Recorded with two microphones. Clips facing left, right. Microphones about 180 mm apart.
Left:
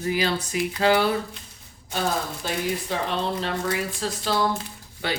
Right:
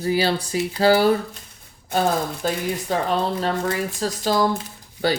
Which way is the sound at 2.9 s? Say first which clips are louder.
Right 4 dB; 45° right (ahead or behind).